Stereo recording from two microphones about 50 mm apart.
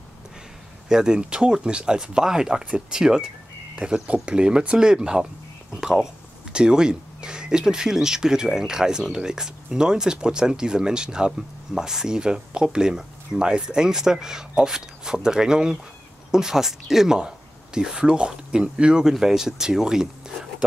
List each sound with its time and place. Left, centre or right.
0.8 s speech: centre
19.0 s speech: centre